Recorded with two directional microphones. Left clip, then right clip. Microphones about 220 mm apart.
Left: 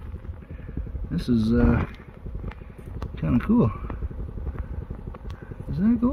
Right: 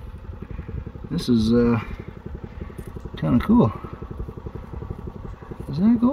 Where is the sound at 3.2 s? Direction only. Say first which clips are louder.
Right 4 dB; 20° right (ahead or behind).